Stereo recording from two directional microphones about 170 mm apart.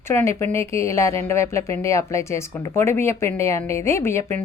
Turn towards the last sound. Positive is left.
turn(degrees=15)  # may be behind; listen again after turning